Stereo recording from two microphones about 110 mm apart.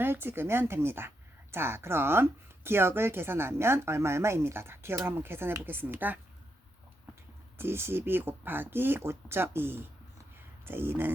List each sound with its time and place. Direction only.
0.0 s speech: 20° right (ahead or behind)
7.6 s speech: 20° right (ahead or behind)